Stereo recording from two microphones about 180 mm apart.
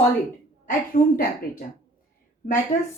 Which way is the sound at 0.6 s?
50° left (ahead or behind).